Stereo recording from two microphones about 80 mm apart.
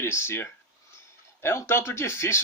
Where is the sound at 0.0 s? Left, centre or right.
Left.